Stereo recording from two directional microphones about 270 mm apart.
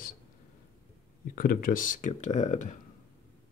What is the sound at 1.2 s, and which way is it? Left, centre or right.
Speech, left.